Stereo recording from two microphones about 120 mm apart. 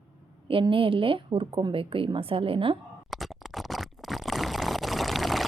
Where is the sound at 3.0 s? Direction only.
Centre (ahead or behind).